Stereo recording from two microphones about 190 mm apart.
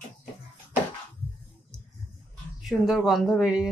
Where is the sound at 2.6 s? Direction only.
Centre (ahead or behind).